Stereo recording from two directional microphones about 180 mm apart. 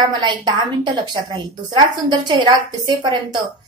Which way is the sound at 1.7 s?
25° right (ahead or behind).